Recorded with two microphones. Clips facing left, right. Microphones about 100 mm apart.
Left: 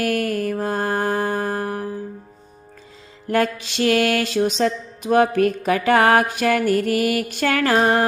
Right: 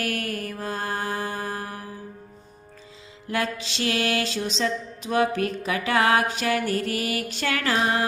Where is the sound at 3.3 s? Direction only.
50° left (ahead or behind).